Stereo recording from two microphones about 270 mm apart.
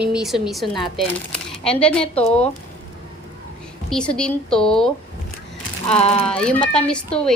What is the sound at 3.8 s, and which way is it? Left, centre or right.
Speech, centre.